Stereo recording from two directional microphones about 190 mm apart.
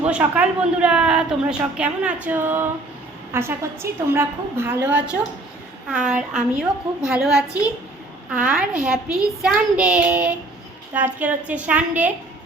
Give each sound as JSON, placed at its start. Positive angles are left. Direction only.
{"t": 0.0, "sound": "a woman's voice", "side_deg": -10}